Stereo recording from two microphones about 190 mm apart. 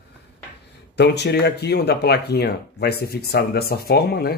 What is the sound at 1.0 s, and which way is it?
Speech, 60° left (ahead or behind).